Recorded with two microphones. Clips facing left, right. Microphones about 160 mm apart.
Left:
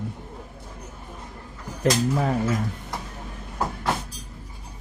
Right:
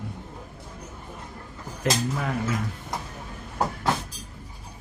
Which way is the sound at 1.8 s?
35° left (ahead or behind).